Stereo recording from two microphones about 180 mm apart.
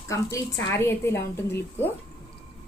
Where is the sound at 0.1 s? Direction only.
15° left (ahead or behind).